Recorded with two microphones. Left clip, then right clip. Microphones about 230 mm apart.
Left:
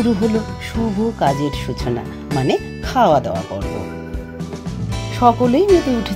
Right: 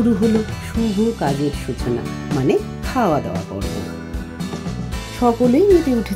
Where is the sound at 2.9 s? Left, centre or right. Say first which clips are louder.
Left 5 dB; left.